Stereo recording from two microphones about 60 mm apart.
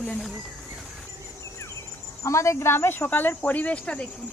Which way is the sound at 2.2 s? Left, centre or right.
Left.